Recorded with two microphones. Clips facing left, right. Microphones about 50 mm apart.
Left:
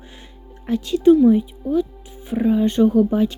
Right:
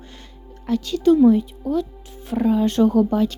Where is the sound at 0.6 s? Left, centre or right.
Left.